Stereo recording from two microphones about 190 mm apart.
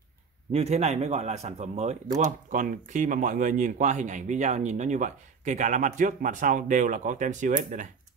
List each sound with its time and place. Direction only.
0.5 s speech: 35° right (ahead or behind)